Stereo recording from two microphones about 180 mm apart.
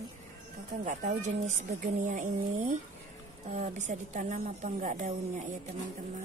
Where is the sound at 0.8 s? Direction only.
40° right (ahead or behind).